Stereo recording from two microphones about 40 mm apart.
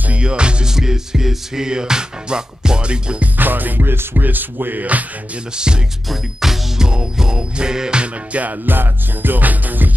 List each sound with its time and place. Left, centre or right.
0.2 s music: right
0.7 s music: centre
3.3 s music: right
3.9 s music: right
4.2 s music: right
6.0 s music: centre
6.9 s music: centre
8.0 s music: right
8.6 s music: right